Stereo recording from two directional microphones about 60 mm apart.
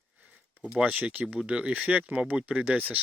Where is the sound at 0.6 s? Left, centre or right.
Centre.